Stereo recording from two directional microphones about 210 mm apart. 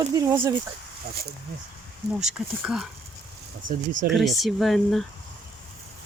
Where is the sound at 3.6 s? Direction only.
40° right (ahead or behind).